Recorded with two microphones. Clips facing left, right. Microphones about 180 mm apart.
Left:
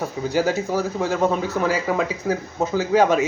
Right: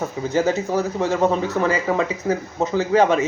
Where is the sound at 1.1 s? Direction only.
15° right (ahead or behind).